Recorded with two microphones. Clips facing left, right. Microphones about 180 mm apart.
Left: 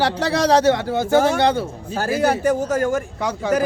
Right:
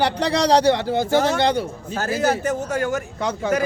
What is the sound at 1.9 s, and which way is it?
Speech, 10° left (ahead or behind).